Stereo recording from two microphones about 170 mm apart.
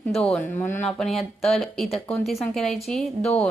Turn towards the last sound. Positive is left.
turn(degrees=5)  # may be behind; listen again after turning